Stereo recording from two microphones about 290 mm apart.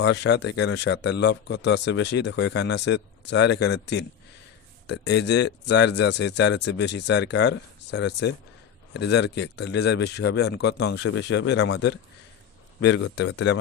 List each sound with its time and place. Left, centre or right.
0.0 s speech: left